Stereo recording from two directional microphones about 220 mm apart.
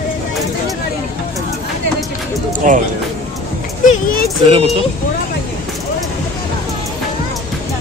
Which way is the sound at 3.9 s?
40° left (ahead or behind).